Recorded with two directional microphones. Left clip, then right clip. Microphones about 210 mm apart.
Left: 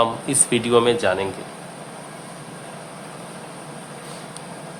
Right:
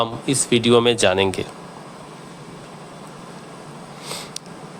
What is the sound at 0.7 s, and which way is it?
Speech, 35° right (ahead or behind).